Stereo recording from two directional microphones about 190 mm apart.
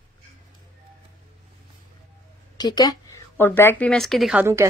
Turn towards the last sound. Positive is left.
turn(degrees=-10)  # may be behind; listen again after turning